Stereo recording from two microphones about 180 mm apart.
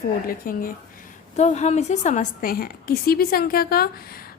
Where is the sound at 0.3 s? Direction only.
50° left (ahead or behind).